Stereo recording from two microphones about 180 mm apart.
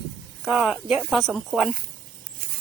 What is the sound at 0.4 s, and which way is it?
Speech, 5° right (ahead or behind).